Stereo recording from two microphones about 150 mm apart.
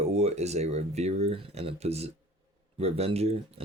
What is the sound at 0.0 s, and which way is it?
Speech, 45° right (ahead or behind).